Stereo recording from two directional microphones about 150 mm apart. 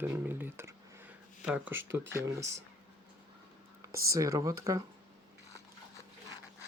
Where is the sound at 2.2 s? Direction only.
20° right (ahead or behind).